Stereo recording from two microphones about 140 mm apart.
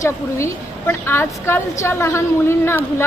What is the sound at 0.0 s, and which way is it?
A woman's voice, 20° left (ahead or behind).